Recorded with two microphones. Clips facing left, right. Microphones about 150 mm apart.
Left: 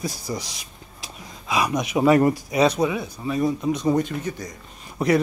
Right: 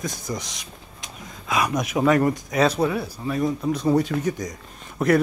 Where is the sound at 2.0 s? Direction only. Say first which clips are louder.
Left 2 dB; 5° left (ahead or behind).